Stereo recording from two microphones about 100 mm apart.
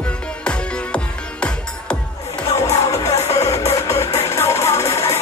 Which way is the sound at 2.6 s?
30° left (ahead or behind).